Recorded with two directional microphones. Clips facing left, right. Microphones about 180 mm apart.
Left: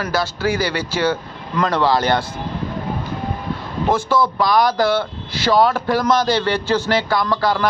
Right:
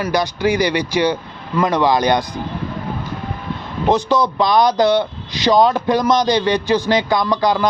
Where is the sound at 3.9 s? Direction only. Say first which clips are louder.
Right 2 dB; 20° right (ahead or behind).